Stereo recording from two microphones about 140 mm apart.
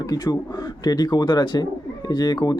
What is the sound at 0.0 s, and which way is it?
Speech, 25° left (ahead or behind).